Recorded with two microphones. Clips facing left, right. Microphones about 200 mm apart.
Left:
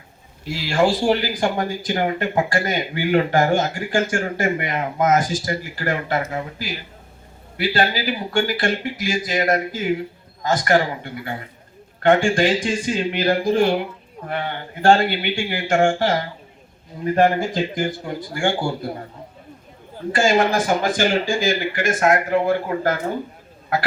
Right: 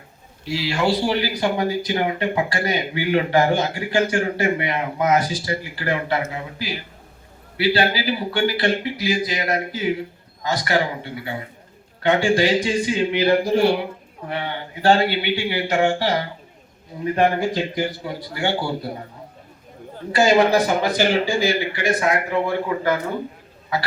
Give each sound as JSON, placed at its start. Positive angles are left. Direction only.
{"t": 0.4, "sound": "speech", "side_deg": 50}
{"t": 17.2, "sound": "speech", "side_deg": 50}
{"t": 20.1, "sound": "speech", "side_deg": 50}